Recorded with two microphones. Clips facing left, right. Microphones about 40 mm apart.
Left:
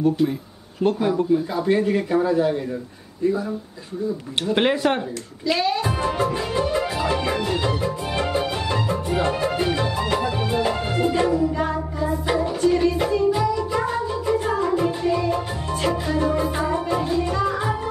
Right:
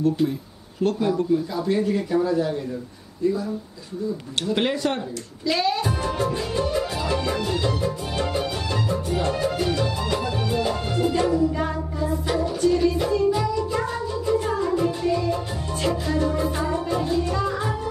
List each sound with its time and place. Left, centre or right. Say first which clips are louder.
0.8 s a man's voice: left 2 dB; left
4.4 s a man's voice: left 3 dB; left
5.5 s speech: left 1 dB; centre
5.9 s music: left 2 dB; left
11.5 s music: left 2 dB; centre; by 13.1 s left
13.4 s music: left 2 dB; centre